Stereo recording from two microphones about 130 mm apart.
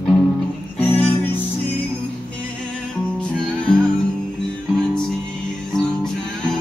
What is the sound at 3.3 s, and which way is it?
Music, 5° left (ahead or behind).